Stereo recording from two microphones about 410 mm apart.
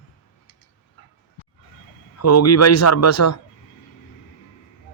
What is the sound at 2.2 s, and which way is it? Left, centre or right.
Speech, left.